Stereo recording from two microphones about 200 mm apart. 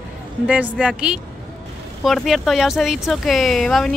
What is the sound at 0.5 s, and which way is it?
Speech, 5° right (ahead or behind).